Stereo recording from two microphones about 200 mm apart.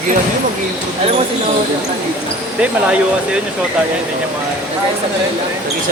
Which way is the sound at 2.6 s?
5° right (ahead or behind).